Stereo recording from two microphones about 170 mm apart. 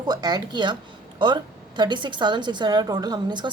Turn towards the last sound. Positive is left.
turn(degrees=-25)  # may be behind; listen again after turning